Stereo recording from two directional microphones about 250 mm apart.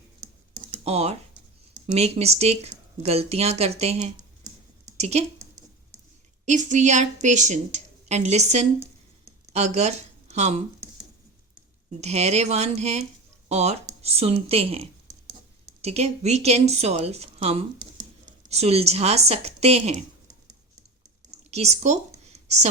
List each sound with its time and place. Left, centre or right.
0.9 s speech: right
6.4 s speech: right
11.9 s speech: right
21.2 s a sound: right